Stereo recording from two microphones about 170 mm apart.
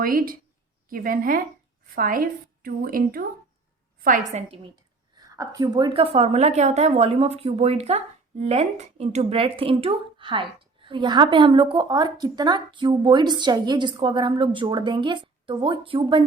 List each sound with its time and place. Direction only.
0.0 s a woman's voice: 55° right (ahead or behind)
5.2 s a woman's voice: 20° right (ahead or behind)